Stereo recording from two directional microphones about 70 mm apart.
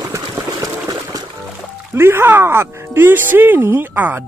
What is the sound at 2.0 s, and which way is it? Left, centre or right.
Speech, right.